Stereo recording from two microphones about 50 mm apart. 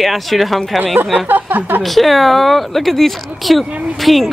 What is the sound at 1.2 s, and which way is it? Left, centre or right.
Speech, right.